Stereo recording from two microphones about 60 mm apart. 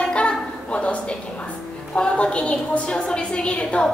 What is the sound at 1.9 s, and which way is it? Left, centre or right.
A woman's voice, centre.